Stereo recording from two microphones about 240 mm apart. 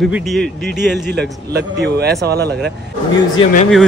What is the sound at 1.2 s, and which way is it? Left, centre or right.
A man's voice, right.